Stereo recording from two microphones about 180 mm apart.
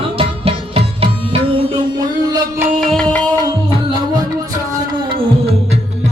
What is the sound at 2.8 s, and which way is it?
Music, 5° left (ahead or behind).